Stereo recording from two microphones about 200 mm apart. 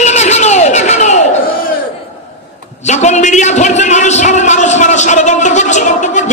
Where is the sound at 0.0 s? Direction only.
35° left (ahead or behind).